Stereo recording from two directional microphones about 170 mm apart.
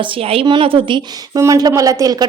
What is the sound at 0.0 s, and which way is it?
A woman's voice, 35° right (ahead or behind).